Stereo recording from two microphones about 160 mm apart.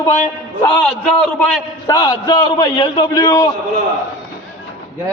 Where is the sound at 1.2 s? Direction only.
5° left (ahead or behind).